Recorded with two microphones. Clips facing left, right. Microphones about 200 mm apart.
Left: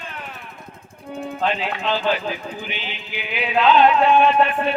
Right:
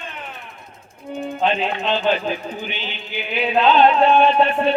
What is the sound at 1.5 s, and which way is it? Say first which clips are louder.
Music: right 2 dB; 25° right (ahead or behind).